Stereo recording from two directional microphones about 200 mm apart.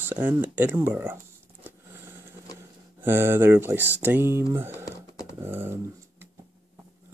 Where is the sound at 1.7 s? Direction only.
10° right (ahead or behind).